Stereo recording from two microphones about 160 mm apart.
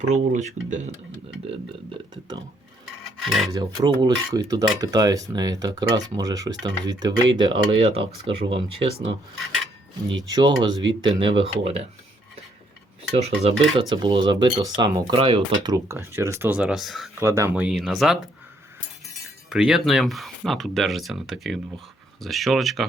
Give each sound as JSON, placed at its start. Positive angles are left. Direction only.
{"t": 0.0, "sound": "speech", "side_deg": -45}
{"t": 1.5, "sound": "speech", "side_deg": -30}
{"t": 3.2, "sound": "speech", "side_deg": 0}
{"t": 3.5, "sound": "speech", "side_deg": -25}
{"t": 10.2, "sound": "speech", "side_deg": -25}
{"t": 13.1, "sound": "speech", "side_deg": -40}
{"t": 13.7, "sound": "speech", "side_deg": -30}
{"t": 17.2, "sound": "speech", "side_deg": -15}
{"t": 17.5, "sound": "speech", "side_deg": -5}
{"t": 19.5, "sound": "speech", "side_deg": 0}